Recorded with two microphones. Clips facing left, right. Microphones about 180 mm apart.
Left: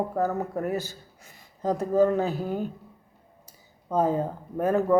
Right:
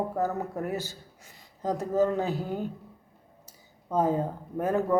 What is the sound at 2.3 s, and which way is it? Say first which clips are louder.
Speech: left 2 dB; 15° left (ahead or behind).